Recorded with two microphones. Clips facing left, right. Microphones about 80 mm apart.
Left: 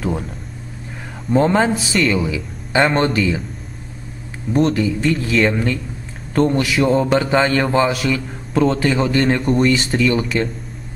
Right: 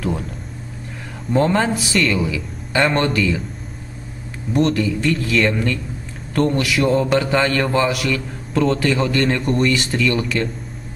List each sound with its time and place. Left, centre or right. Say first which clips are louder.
0.0 s a sound: left 1 dB; centre
1.3 s a man's voice: left 2 dB; centre
2.7 s a man's voice: left 2 dB; centre
4.6 s a man's voice: left 1 dB; centre